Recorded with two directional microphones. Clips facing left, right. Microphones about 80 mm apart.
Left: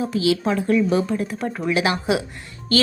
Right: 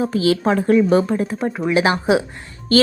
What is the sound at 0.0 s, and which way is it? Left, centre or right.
A woman's voice, right.